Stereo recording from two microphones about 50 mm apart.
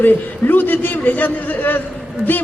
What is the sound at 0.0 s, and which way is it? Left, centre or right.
Speech, left.